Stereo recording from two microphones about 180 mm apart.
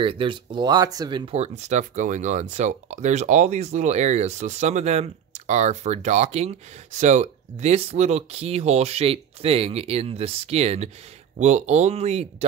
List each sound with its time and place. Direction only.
0.0 s speech: 30° right (ahead or behind)